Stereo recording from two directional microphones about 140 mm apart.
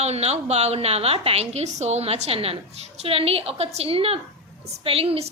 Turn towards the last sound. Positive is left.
turn(degrees=-45)  # may be behind; listen again after turning